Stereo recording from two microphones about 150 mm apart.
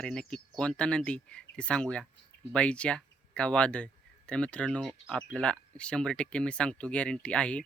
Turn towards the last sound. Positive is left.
turn(degrees=5)  # may be behind; listen again after turning